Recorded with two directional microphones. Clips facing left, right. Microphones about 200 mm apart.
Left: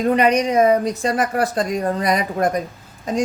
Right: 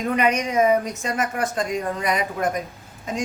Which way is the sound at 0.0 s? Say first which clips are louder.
Left 5 dB; 35° left (ahead or behind).